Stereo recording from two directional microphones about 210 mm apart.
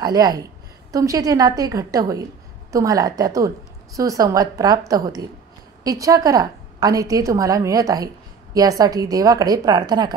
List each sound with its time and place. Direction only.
0.0 s a woman's voice: 20° right (ahead or behind)